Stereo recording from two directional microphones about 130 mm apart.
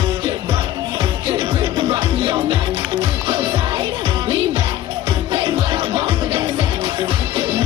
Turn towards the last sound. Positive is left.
turn(degrees=-35)  # may be behind; listen again after turning